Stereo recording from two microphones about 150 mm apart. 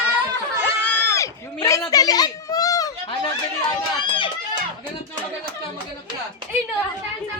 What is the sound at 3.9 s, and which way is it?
Speech, 35° left (ahead or behind).